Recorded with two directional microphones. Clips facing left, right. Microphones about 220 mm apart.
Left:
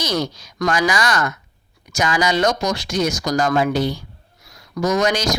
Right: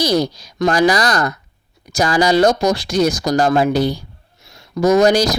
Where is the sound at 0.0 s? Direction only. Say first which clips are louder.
Right 6 dB; 35° right (ahead or behind).